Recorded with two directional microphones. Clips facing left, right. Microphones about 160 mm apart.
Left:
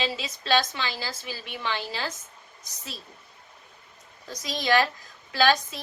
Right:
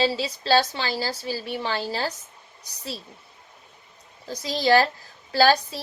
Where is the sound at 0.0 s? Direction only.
35° right (ahead or behind).